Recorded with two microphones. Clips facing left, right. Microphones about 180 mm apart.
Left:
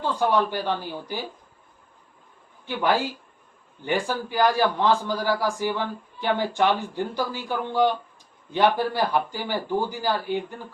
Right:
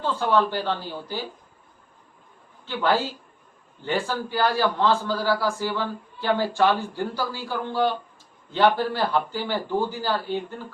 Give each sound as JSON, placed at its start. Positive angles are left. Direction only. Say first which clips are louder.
{"t": 0.0, "sound": "a man's voice", "louder": "even", "side_deg": 15}
{"t": 2.6, "sound": "a man's voice", "louder": "even", "side_deg": 15}